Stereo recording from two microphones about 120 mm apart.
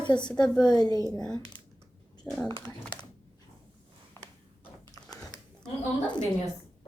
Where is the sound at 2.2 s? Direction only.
5° left (ahead or behind).